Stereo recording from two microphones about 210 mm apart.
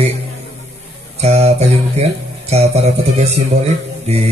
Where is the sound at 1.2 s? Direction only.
30° right (ahead or behind).